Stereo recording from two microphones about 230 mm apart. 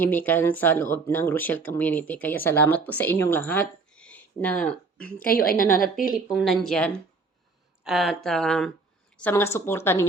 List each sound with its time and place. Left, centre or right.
0.0 s speech: centre
5.2 s a woman's voice: left
6.3 s speech: centre